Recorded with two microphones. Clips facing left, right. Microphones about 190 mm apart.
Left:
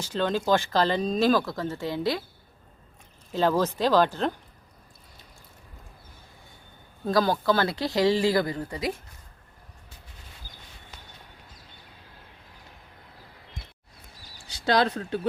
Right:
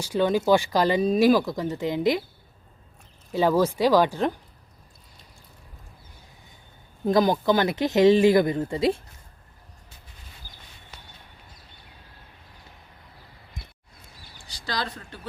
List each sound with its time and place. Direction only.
0.0 s speech: 15° right (ahead or behind)
3.3 s speech: 10° right (ahead or behind)
7.0 s speech: 20° right (ahead or behind)
14.7 s speech: 65° left (ahead or behind)